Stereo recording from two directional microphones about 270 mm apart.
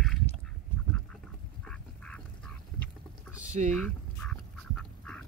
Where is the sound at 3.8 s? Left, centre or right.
Centre.